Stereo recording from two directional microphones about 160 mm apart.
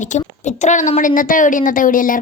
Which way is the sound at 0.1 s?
50° left (ahead or behind).